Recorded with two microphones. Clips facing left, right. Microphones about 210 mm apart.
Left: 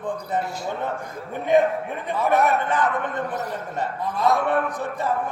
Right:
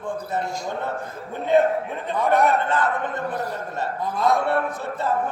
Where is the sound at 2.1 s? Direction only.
15° left (ahead or behind).